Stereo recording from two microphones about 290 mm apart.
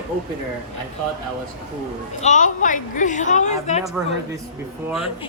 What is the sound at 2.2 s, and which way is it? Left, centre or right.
A woman's voice, left.